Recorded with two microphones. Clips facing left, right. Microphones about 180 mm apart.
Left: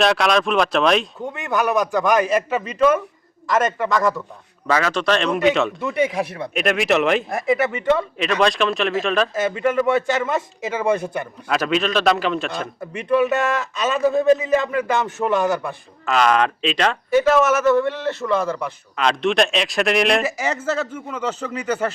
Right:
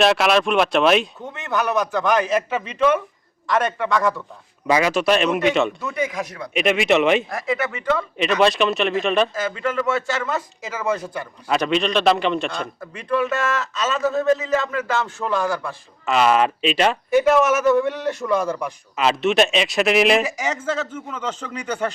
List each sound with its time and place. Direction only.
0.0 s speech: 5° right (ahead or behind)
1.5 s a man's voice: 15° left (ahead or behind)
1.8 s speech: 5° left (ahead or behind)
4.6 s speech: 10° right (ahead or behind)
5.8 s speech: 25° left (ahead or behind)
6.5 s speech: centre (ahead or behind)
9.3 s speech: 20° left (ahead or behind)
11.4 s speech: centre (ahead or behind)
12.8 s a man's voice: 10° left (ahead or behind)
16.0 s speech: 5° right (ahead or behind)